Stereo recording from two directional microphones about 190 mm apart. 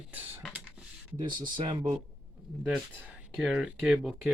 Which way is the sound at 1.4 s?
25° right (ahead or behind).